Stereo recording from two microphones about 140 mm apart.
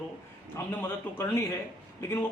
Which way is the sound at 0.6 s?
15° left (ahead or behind).